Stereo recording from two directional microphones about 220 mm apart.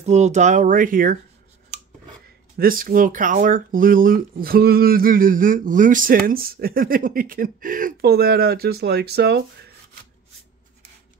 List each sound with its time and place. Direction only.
0.0 s speech: 30° right (ahead or behind)
2.5 s speech: 40° right (ahead or behind)